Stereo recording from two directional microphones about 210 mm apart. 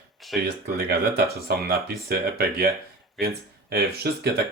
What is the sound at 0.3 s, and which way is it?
Speech, 50° right (ahead or behind).